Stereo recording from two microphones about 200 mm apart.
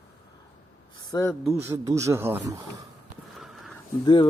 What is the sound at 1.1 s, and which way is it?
Speech, 20° left (ahead or behind).